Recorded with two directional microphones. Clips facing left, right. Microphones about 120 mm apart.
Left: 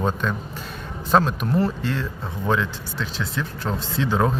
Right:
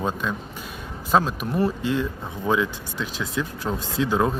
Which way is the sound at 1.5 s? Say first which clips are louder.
Right 1 dB; 15° right (ahead or behind).